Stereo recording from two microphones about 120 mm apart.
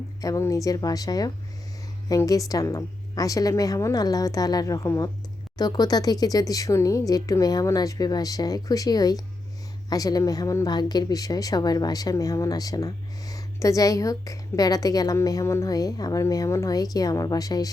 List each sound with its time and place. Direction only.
0.2 s a woman's voice: 25° left (ahead or behind)